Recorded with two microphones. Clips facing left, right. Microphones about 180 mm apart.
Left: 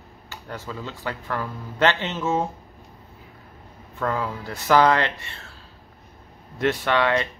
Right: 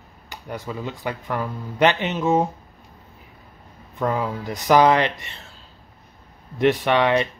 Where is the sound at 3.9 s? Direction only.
15° right (ahead or behind).